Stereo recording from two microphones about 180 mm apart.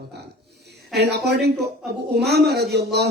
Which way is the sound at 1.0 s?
65° right (ahead or behind).